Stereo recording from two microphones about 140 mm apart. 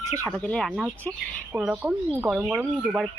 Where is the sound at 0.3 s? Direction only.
5° left (ahead or behind).